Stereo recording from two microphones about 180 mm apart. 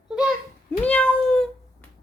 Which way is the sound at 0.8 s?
5° left (ahead or behind).